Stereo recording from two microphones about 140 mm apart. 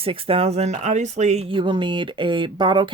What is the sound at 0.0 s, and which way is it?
Speech, 40° right (ahead or behind).